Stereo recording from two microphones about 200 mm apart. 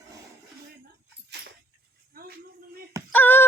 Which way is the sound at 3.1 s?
10° left (ahead or behind).